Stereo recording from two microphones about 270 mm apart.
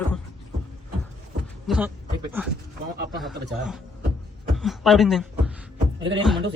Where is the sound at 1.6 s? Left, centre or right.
Centre.